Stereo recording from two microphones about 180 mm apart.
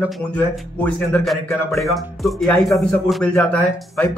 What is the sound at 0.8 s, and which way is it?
Speech, 5° left (ahead or behind).